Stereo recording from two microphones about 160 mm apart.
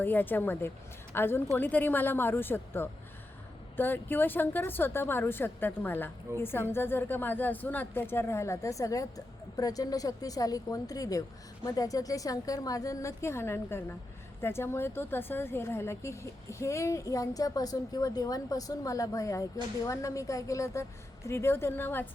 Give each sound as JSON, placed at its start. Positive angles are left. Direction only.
{"t": 0.0, "sound": "a woman's voice", "side_deg": 10}